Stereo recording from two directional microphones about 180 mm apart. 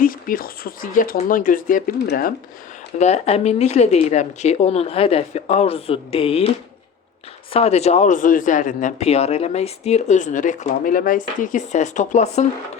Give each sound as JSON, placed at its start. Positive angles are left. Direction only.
{"t": 0.0, "sound": "speech", "side_deg": 50}
{"t": 3.0, "sound": "speech", "side_deg": 35}
{"t": 7.5, "sound": "speech", "side_deg": 35}